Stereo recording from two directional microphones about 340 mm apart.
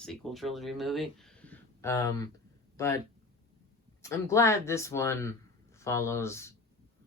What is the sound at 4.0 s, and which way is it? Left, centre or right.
Speech, centre.